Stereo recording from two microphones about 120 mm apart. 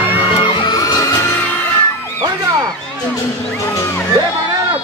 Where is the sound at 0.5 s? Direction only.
35° left (ahead or behind).